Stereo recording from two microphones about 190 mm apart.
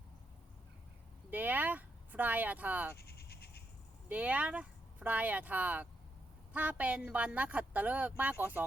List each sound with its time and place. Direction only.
1.3 s speech: 10° right (ahead or behind)
3.0 s bleat: 55° left (ahead or behind)
4.1 s speech: 5° right (ahead or behind)